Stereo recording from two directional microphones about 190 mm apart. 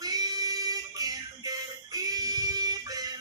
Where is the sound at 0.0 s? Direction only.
20° right (ahead or behind).